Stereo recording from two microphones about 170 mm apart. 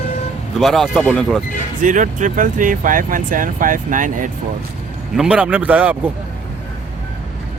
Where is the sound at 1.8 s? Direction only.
50° right (ahead or behind).